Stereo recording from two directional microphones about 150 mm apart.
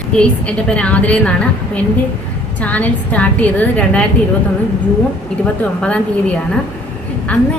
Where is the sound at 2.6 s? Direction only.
10° left (ahead or behind).